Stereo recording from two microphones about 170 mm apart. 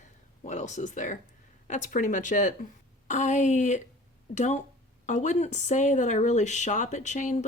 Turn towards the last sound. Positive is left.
turn(degrees=45)  # may be behind; listen again after turning